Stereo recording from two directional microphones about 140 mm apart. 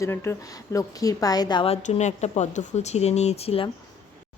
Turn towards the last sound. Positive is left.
turn(degrees=45)  # may be behind; listen again after turning